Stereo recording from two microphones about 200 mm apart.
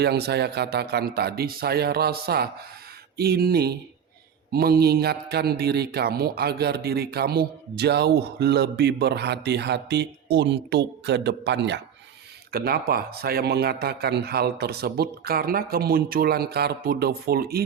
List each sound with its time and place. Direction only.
0.0 s speech: 55° right (ahead or behind)
12.5 s speech: 50° right (ahead or behind)